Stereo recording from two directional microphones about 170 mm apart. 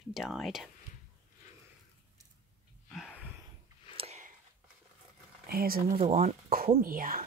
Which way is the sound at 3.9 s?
40° right (ahead or behind).